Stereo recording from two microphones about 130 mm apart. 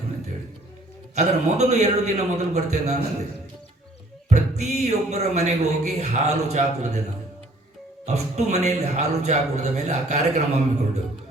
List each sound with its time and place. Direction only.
1.1 s speech: 60° right (ahead or behind)
4.3 s speech: 60° right (ahead or behind)
8.0 s speech: 60° right (ahead or behind)